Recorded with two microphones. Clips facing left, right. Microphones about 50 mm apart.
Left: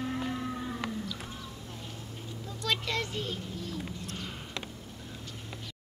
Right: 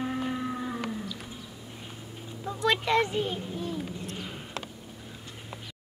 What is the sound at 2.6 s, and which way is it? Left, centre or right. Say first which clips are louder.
Speech: right 7 dB; right.